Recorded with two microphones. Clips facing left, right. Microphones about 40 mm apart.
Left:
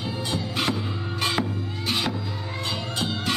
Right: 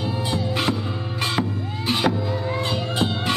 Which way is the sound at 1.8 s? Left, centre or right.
Centre.